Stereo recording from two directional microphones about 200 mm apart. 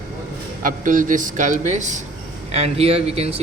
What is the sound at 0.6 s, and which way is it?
A man's voice, 40° right (ahead or behind).